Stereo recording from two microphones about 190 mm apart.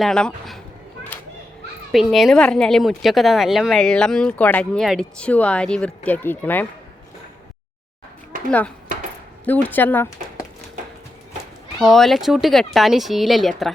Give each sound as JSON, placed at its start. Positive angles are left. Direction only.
{"t": 0.0, "sound": "speech", "side_deg": 5}
{"t": 1.9, "sound": "speech", "side_deg": 0}
{"t": 8.4, "sound": "speech", "side_deg": 5}
{"t": 11.8, "sound": "speech", "side_deg": 0}